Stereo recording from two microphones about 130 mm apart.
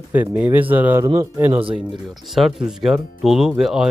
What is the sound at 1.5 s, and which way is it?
Speech, 45° right (ahead or behind).